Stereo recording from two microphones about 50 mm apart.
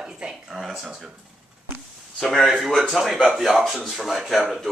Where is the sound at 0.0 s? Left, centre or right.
Centre.